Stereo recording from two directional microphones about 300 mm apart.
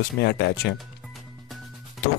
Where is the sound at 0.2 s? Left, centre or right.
Left.